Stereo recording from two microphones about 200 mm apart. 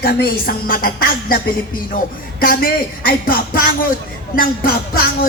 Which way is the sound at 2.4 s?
45° left (ahead or behind).